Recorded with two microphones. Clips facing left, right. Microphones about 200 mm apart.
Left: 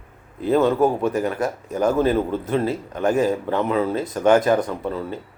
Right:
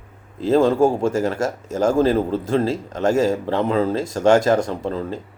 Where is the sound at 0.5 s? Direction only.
30° right (ahead or behind).